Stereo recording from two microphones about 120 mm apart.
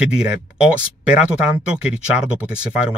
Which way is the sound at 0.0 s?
5° right (ahead or behind).